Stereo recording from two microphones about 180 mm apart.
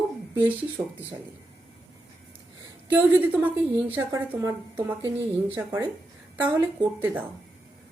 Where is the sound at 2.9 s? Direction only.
10° right (ahead or behind).